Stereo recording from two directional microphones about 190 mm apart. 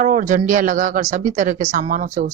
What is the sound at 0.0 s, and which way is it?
Speech, 45° right (ahead or behind).